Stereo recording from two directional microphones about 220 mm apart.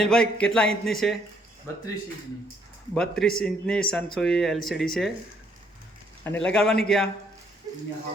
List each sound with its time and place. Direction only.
0.0 s speech: 5° left (ahead or behind)
2.9 s speech: 5° left (ahead or behind)
6.2 s speech: 5° left (ahead or behind)